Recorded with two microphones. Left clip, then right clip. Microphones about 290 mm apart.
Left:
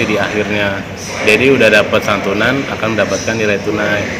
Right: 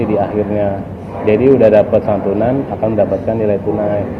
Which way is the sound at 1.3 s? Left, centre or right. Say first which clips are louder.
Even; centre.